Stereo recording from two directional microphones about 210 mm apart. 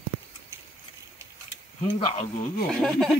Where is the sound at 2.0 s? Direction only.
25° left (ahead or behind).